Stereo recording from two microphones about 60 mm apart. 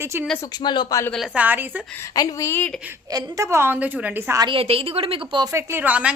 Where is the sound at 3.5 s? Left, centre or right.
Right.